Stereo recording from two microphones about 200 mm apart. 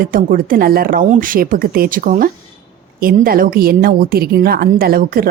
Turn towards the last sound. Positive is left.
turn(degrees=-45)  # may be behind; listen again after turning